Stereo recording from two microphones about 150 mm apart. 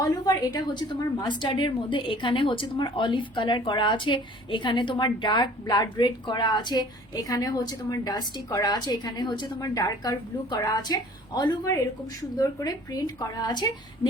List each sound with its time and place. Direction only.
0.0 s a woman's voice: 25° left (ahead or behind)